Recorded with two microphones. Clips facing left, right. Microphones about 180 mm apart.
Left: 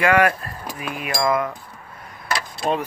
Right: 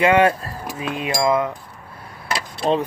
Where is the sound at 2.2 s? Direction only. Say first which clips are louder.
Right 2 dB; 25° right (ahead or behind).